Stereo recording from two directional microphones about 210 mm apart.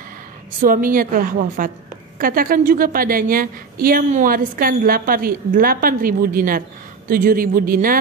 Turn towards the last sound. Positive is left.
turn(degrees=-40)  # may be behind; listen again after turning